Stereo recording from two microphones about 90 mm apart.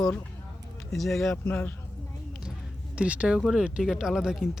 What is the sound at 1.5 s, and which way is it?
Speech, 15° left (ahead or behind).